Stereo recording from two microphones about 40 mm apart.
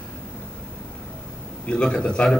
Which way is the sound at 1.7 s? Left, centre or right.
Left.